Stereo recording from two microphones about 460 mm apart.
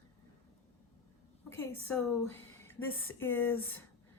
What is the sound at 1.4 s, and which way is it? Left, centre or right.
A woman's voice, centre.